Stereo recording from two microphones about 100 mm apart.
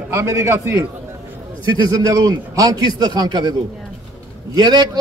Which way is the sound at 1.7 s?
40° right (ahead or behind).